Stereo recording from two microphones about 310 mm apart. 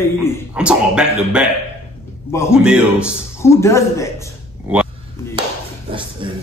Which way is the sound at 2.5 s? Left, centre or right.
Centre.